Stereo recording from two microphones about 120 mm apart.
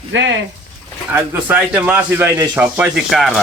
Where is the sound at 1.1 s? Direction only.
15° right (ahead or behind).